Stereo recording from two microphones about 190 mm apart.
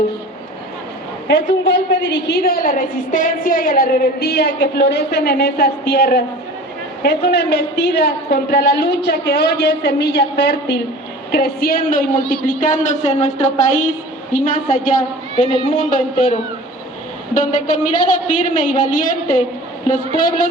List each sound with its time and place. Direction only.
1.3 s a woman's voice: 70° left (ahead or behind); by 20.5 s 45° left (ahead or behind)